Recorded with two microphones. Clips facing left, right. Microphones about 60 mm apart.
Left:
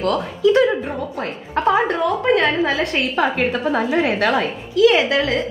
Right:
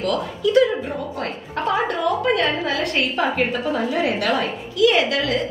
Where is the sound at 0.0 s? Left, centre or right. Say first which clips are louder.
Left 4 dB; left.